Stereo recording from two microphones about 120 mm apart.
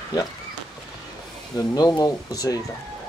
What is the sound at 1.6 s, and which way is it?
Speech, 35° left (ahead or behind).